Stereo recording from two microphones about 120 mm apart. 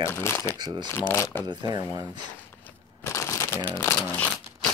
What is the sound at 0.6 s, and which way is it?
Speech, 40° right (ahead or behind).